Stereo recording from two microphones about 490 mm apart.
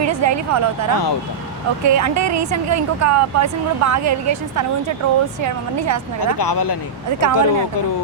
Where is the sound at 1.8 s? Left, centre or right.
Right.